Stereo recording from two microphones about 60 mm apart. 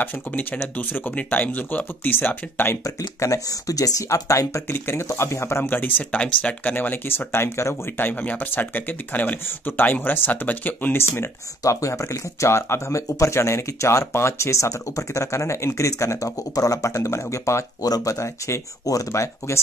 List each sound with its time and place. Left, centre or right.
0.0 s speech: left
2.8 s speech: left
4.1 s speech: left
4.6 s speech: left
6.1 s speech: centre
6.6 s speech: left
8.0 s speech: left
11.0 s speech: left
11.6 s speech: left
17.8 s speech: left
18.9 s speech: left